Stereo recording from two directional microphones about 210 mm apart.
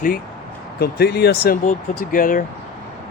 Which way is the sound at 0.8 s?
50° left (ahead or behind).